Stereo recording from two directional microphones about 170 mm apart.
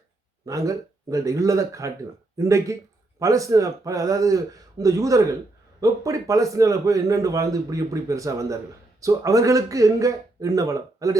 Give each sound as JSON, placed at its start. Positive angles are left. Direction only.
{"t": 0.4, "sound": "a man's voice", "side_deg": -20}